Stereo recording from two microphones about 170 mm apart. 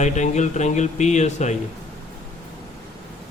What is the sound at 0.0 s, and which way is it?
Speech, 45° left (ahead or behind).